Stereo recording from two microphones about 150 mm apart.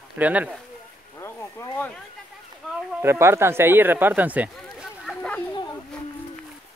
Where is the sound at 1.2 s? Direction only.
15° left (ahead or behind).